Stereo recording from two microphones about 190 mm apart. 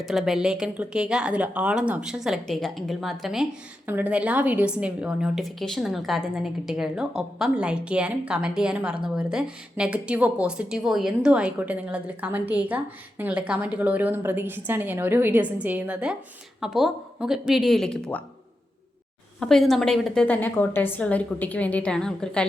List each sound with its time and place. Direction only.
0.0 s a woman's voice: centre (ahead or behind)
19.4 s a woman's voice: centre (ahead or behind)